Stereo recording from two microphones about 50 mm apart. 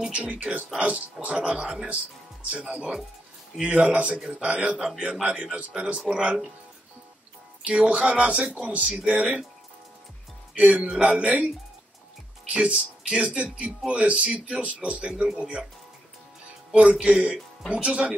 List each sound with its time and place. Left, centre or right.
0.1 s speech: right
1.5 s speech: centre
3.6 s speech: right
4.7 s speech: centre
7.6 s speech: right
10.5 s a man's voice: right
11.0 s speech: right
12.5 s speech: right
16.7 s speech: right